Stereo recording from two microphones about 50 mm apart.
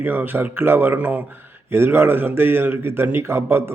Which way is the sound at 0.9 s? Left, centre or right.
Right.